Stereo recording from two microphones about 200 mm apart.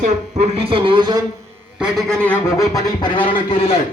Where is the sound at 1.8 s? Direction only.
Centre (ahead or behind); by 3.7 s 30° left (ahead or behind).